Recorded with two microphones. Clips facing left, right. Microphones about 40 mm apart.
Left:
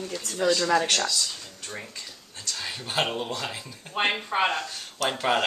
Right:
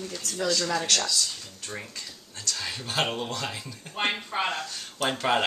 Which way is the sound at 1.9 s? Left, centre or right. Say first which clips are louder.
Even; centre.